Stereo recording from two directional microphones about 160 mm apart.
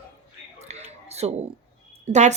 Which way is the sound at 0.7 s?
40° right (ahead or behind).